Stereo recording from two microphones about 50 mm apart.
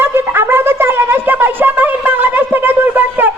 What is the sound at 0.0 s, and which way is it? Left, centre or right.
Wind instrument, right.